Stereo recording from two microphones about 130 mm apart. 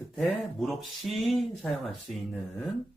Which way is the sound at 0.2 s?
Centre (ahead or behind).